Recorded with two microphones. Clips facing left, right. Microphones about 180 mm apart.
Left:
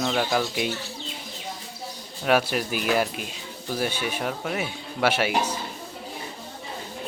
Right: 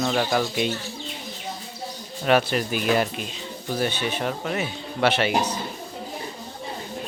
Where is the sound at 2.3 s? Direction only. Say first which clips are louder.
Right 2 dB; 5° left (ahead or behind).